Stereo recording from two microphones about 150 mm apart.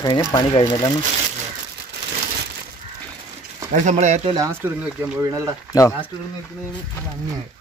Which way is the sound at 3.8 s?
50° right (ahead or behind).